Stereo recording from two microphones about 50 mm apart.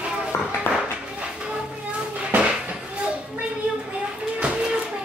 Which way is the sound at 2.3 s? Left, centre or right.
Right.